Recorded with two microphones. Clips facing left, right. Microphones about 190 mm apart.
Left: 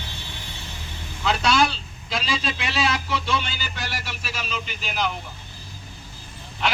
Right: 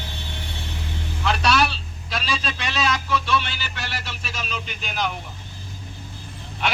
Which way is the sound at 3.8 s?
10° left (ahead or behind).